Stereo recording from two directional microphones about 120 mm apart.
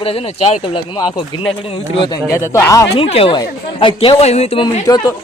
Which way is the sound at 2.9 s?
50° left (ahead or behind).